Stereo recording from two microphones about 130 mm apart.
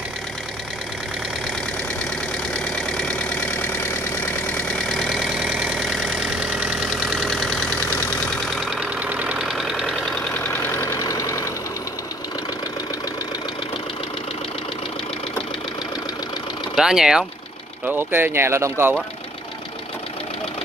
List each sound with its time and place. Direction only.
2.6 s vehicle: 5° left (ahead or behind)
8.5 s engine: 5° right (ahead or behind); by 11.5 s 25° left (ahead or behind)
16.7 s speech: 5° right (ahead or behind)
17.8 s speech: 15° right (ahead or behind)